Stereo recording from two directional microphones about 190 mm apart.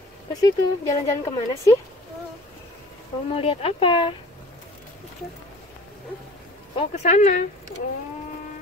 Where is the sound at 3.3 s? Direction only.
30° left (ahead or behind).